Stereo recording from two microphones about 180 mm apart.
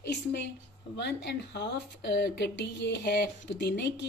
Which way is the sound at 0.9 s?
70° left (ahead or behind).